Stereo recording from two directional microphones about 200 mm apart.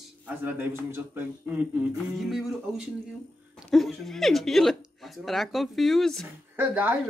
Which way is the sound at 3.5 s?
Centre (ahead or behind).